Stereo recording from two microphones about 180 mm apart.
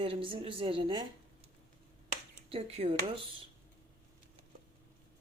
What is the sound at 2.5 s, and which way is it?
Speech, 35° right (ahead or behind).